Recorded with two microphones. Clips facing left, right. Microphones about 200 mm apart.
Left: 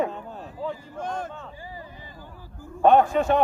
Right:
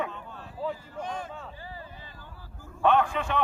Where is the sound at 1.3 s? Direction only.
5° right (ahead or behind).